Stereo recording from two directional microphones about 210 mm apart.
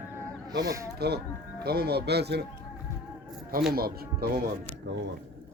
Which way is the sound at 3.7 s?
45° right (ahead or behind).